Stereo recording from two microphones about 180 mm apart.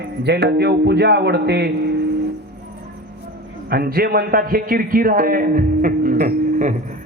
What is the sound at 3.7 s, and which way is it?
A man's voice, 55° right (ahead or behind).